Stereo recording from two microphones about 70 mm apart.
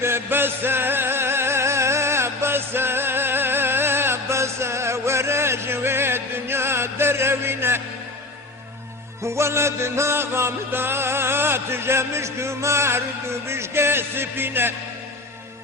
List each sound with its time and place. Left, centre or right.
0.0 s music: right
9.2 s music: right